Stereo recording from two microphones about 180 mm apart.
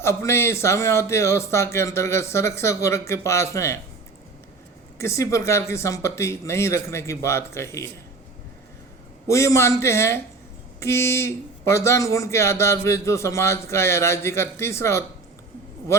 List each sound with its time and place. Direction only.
0.0 s a man's voice: 15° left (ahead or behind)
4.9 s a man's voice: 15° left (ahead or behind)
9.2 s a man's voice: 15° left (ahead or behind)